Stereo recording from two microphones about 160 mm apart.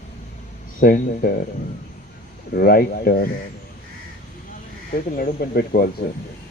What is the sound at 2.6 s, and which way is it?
Speech, 65° left (ahead or behind).